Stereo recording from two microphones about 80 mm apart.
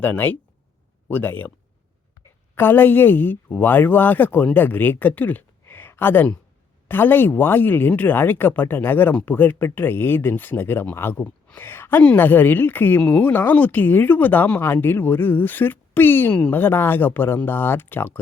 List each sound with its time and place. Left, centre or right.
0.0 s speech: left
2.6 s speech: left